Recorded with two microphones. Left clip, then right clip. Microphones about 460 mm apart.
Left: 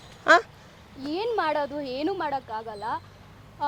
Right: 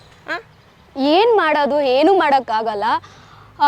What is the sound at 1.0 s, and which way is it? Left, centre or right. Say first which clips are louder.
A woman's voice: right 14 dB; right.